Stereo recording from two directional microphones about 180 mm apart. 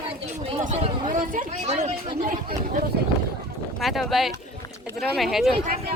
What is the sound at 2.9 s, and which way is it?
Speech, 60° right (ahead or behind).